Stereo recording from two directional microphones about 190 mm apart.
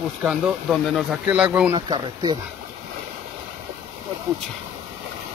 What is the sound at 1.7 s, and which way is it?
Speech, 25° right (ahead or behind).